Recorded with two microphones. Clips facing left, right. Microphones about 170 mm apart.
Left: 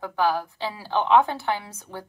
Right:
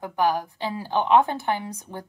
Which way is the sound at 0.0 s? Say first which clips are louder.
Right 1 dB; 15° right (ahead or behind).